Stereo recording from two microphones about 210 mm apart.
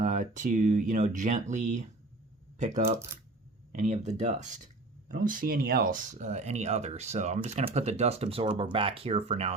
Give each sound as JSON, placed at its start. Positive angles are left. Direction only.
{"t": 0.0, "sound": "speech", "side_deg": -35}